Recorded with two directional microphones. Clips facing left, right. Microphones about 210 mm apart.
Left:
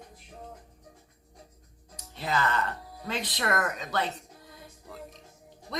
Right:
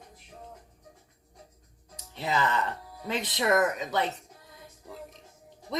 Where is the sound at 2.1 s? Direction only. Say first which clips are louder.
Right 1 dB; 20° right (ahead or behind).